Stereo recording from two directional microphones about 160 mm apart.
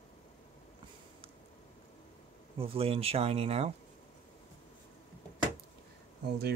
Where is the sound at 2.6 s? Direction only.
35° right (ahead or behind).